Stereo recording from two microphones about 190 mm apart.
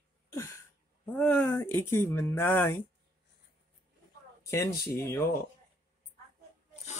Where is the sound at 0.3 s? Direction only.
15° left (ahead or behind).